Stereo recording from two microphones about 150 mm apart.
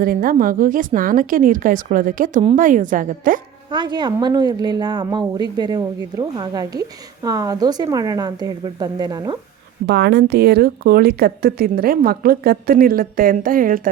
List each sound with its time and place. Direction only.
0.0 s a woman's voice: 75° right (ahead or behind)
3.7 s a woman's voice: 30° right (ahead or behind)
9.8 s a woman's voice: 90° right; by 13.9 s 65° right (ahead or behind)